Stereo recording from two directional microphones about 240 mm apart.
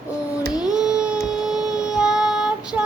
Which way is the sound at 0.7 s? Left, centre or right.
Centre.